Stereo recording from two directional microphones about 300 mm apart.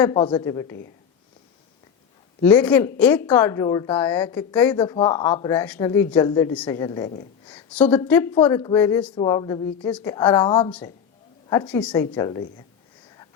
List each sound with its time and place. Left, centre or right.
0.0 s speech: centre
2.4 s speech: centre